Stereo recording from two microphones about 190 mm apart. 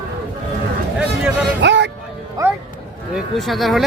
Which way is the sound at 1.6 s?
70° right (ahead or behind).